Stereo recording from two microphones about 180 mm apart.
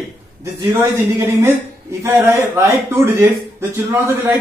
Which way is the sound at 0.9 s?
15° right (ahead or behind).